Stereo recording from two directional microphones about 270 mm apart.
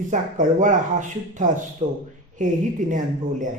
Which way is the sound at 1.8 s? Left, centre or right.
Centre.